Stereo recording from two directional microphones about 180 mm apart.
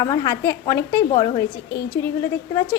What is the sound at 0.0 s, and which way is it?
A woman's voice, 20° left (ahead or behind).